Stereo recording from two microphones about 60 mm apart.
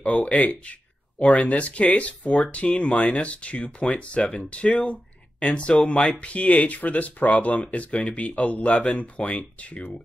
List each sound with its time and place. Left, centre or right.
0.0 s speech: left